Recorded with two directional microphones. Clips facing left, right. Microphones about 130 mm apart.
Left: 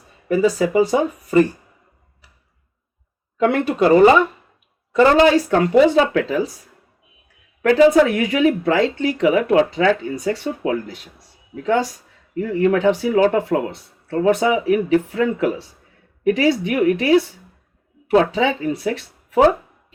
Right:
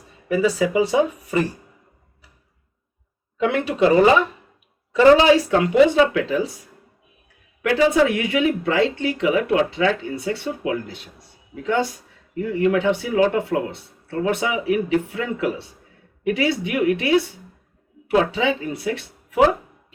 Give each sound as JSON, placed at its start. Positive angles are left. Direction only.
{"t": 0.3, "sound": "speech", "side_deg": 45}
{"t": 3.3, "sound": "speech", "side_deg": 45}
{"t": 4.9, "sound": "speech", "side_deg": 50}
{"t": 7.6, "sound": "speech", "side_deg": 40}